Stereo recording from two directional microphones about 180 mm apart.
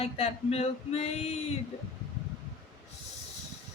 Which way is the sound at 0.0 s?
35° left (ahead or behind).